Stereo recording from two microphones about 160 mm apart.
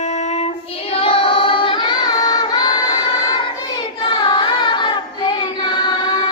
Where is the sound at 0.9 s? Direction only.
35° left (ahead or behind).